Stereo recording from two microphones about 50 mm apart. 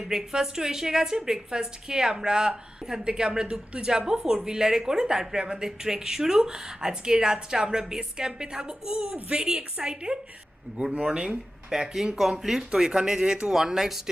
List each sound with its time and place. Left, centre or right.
0.0 s speech: centre